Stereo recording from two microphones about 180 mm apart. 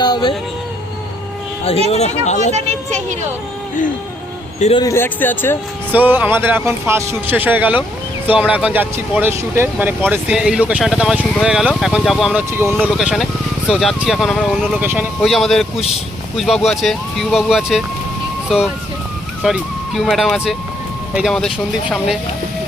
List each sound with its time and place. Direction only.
0.0 s a sound: 25° left (ahead or behind)
1.9 s speech: 35° left (ahead or behind)
4.8 s speech: 15° left (ahead or behind)
5.9 s speech: 10° right (ahead or behind)
12.7 s speech: 5° right (ahead or behind)
14.8 s speech: 10° right (ahead or behind)
15.2 s speech: centre (ahead or behind)